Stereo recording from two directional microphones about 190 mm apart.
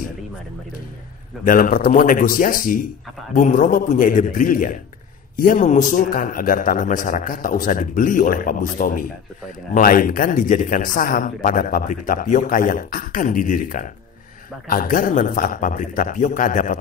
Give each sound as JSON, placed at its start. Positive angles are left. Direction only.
{"t": 1.4, "sound": "speech", "side_deg": 45}